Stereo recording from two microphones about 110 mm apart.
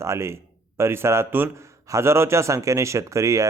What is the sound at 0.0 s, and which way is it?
A man's voice, 25° right (ahead or behind).